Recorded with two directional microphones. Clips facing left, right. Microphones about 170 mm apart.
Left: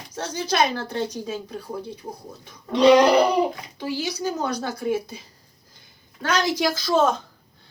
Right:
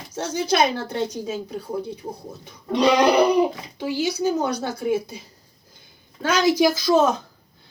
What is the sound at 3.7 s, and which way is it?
Speech, 15° right (ahead or behind).